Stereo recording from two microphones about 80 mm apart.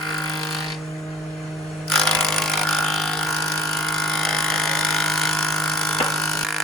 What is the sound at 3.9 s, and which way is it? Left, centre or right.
Vehicle, centre.